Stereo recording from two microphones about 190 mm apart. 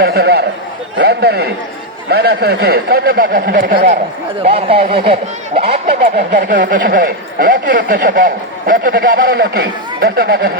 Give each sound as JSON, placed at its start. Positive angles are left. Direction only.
{"t": 0.0, "sound": "a man's voice", "side_deg": -55}
{"t": 4.4, "sound": "speech", "side_deg": -30}
{"t": 6.1, "sound": "speech", "side_deg": -45}